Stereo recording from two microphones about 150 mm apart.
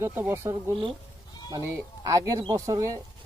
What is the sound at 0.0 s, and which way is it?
Speech, 15° right (ahead or behind).